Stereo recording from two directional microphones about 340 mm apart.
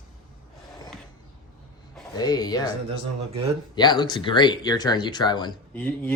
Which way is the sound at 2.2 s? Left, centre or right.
Centre.